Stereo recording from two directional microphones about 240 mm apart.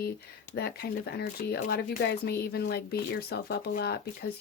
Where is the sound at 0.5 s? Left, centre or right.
Left.